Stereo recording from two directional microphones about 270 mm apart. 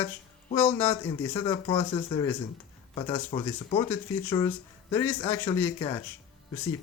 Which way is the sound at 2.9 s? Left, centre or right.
Centre.